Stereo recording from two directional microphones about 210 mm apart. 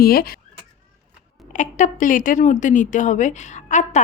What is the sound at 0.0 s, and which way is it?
Speech, 45° left (ahead or behind).